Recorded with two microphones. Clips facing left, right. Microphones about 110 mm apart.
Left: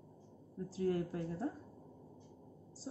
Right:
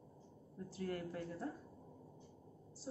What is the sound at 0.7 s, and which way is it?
Speech, 30° left (ahead or behind).